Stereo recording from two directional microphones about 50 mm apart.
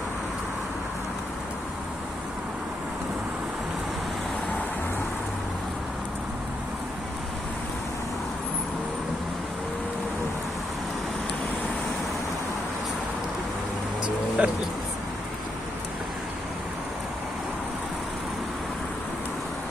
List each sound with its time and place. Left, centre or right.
14.4 s speech: right